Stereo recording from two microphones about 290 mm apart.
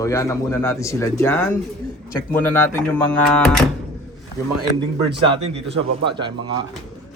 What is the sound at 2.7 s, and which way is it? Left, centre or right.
Speech, centre.